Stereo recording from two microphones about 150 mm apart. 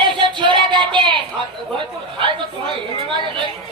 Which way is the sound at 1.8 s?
35° right (ahead or behind).